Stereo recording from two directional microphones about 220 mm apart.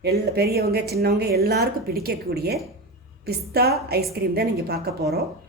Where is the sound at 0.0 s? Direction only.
45° right (ahead or behind).